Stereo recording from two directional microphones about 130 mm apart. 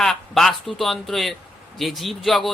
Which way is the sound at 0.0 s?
5° left (ahead or behind).